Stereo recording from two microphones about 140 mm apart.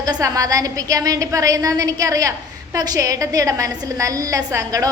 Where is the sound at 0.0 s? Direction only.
25° right (ahead or behind).